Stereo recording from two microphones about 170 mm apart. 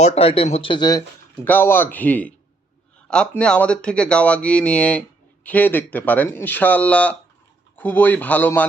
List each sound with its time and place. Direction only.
0.0 s speech: 40° left (ahead or behind)
1.5 s speech: 10° left (ahead or behind)